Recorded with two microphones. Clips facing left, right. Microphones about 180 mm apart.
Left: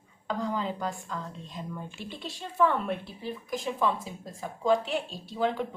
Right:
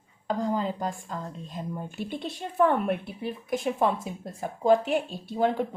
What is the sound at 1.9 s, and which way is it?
A woman's voice, 55° right (ahead or behind).